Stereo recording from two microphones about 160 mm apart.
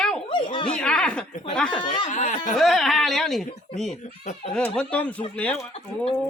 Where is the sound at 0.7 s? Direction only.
5° left (ahead or behind).